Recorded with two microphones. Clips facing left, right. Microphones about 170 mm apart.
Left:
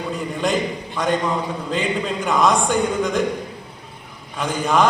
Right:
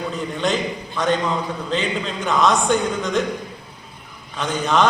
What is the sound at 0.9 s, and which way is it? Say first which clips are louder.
A man's voice: even; 10° left (ahead or behind).